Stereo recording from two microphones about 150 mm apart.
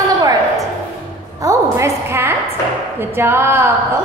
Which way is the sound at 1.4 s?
20° right (ahead or behind).